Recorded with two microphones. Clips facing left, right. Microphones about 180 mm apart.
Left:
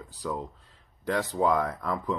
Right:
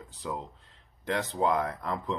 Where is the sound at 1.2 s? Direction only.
Centre (ahead or behind).